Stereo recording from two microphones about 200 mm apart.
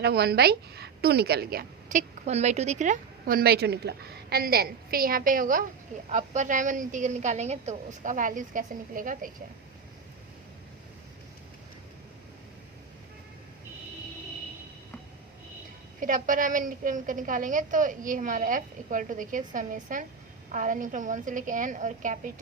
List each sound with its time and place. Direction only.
0.0 s a woman's voice: 50° right (ahead or behind)
16.0 s a woman's voice: 40° right (ahead or behind)